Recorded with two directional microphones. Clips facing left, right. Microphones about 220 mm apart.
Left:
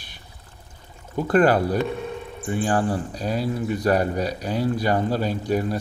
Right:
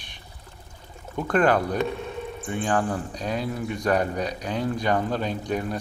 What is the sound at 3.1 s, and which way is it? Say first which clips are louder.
Speech: left 3 dB; 5° left (ahead or behind).